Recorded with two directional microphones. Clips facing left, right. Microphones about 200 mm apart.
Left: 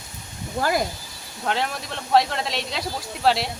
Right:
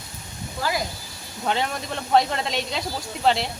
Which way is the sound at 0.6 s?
50° left (ahead or behind).